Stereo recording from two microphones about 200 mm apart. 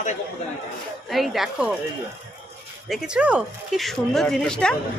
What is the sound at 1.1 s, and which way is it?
Speech, centre (ahead or behind).